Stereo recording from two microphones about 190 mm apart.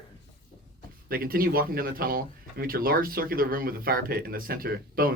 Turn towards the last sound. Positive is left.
turn(degrees=-50)  # may be behind; listen again after turning